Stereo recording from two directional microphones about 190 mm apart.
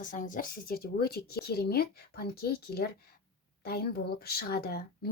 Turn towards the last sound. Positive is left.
turn(degrees=55)  # may be behind; listen again after turning